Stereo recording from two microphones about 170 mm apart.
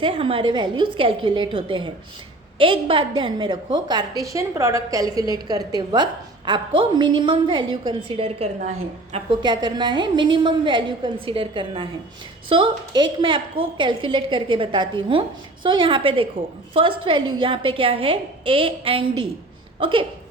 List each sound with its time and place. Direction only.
0.0 s a woman's voice: 30° right (ahead or behind)